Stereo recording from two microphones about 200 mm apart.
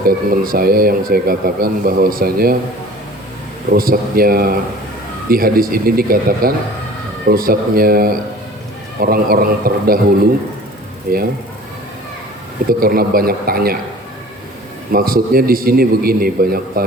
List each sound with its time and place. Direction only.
0.0 s speech: 45° right (ahead or behind)
3.7 s speech: 45° right (ahead or behind)
11.1 s speech: 45° right (ahead or behind)
12.8 s speech: 45° right (ahead or behind)
14.9 s speech: 45° right (ahead or behind)